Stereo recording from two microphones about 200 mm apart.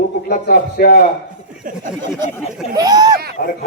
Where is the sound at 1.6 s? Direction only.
40° right (ahead or behind).